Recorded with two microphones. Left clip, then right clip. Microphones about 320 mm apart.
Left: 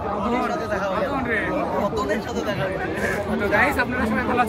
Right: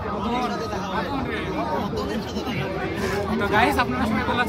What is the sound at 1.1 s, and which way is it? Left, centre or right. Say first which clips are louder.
Chatter: left 4 dB; centre.